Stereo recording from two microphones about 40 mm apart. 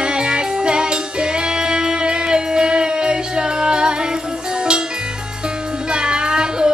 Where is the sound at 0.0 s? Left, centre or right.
Right.